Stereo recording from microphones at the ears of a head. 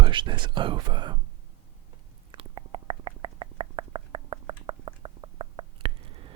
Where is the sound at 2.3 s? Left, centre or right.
Right.